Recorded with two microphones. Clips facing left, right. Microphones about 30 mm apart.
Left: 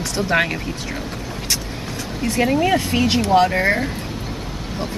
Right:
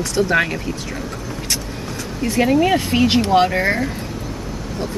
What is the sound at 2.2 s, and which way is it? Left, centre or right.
Speech, centre.